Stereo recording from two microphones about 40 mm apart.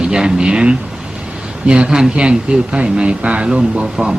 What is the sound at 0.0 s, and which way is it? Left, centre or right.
Speech, right.